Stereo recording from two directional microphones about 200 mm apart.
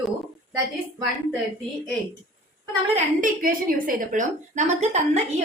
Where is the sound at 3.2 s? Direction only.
45° right (ahead or behind).